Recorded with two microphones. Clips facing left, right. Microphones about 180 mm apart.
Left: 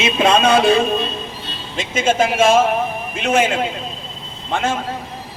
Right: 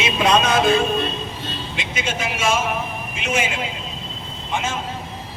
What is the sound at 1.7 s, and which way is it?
A man's voice, 50° left (ahead or behind).